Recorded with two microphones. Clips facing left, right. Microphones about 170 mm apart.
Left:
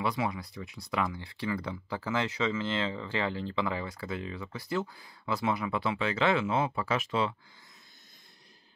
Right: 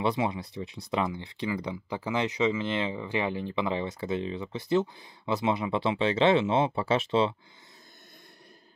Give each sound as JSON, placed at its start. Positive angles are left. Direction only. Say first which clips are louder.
{"t": 0.0, "sound": "speech", "louder": "right 4 dB", "side_deg": -25}